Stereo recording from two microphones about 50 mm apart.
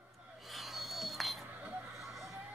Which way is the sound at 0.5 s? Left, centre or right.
Centre.